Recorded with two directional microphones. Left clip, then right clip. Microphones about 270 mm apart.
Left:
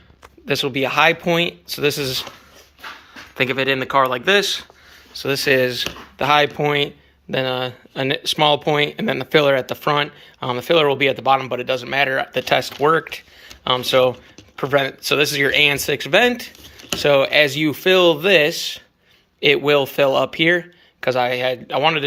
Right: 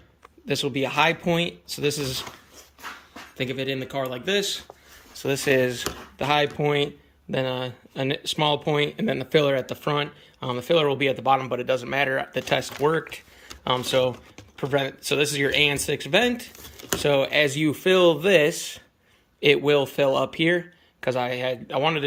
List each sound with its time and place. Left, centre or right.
0.4 s speech: centre
3.3 s speech: centre